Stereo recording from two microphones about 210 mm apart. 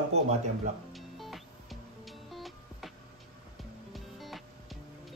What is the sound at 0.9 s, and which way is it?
Music, centre (ahead or behind).